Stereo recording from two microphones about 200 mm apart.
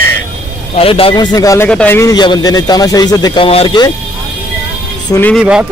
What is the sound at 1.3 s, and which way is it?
Speech, 15° left (ahead or behind).